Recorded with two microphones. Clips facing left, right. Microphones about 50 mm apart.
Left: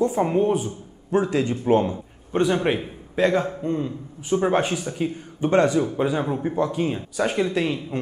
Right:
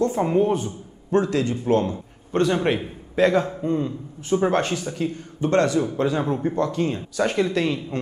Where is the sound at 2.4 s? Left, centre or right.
Centre.